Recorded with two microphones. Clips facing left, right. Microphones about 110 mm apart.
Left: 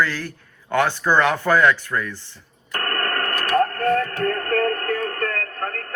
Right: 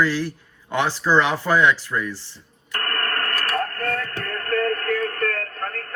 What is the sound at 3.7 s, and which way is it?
Music, 30° left (ahead or behind).